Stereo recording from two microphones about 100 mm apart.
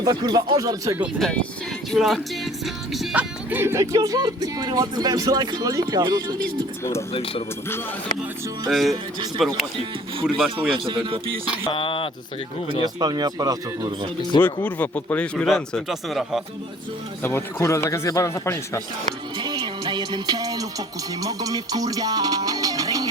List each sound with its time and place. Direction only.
0.0 s speech: 45° right (ahead or behind)
1.2 s speech: 10° left (ahead or behind)
1.9 s speech: centre (ahead or behind)
3.2 s speech: 20° right (ahead or behind); by 6.1 s 40° right (ahead or behind)
6.1 s speech: 50° right (ahead or behind)
7.1 s speech: 70° left (ahead or behind)
8.7 s speech: centre (ahead or behind)
10.8 s speech: 60° right (ahead or behind)
11.7 s speech: 60° left (ahead or behind)
12.8 s speech: 45° right (ahead or behind)
14.4 s speech: 15° left (ahead or behind)
15.4 s speech: centre (ahead or behind)
17.2 s speech: 25° left (ahead or behind)
19.4 s music: 50° right (ahead or behind)